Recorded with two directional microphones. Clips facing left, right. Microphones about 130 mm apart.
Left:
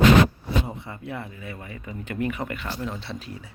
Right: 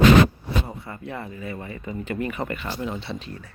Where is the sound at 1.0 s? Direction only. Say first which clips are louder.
Right 2 dB; 5° left (ahead or behind).